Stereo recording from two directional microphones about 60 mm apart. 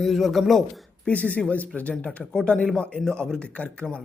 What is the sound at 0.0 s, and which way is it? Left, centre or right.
Speech, centre.